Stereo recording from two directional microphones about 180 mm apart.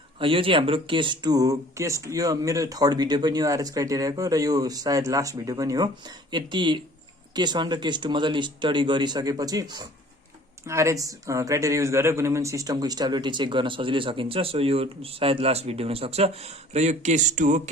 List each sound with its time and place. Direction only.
0.2 s speech: 30° right (ahead or behind)